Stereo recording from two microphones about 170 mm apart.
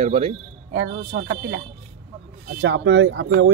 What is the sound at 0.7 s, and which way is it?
Speech, 70° right (ahead or behind).